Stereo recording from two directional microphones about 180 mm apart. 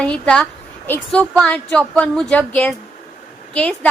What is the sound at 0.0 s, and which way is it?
A woman's voice, 5° left (ahead or behind).